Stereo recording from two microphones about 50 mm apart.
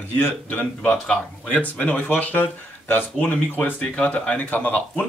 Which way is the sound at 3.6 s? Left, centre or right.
Left.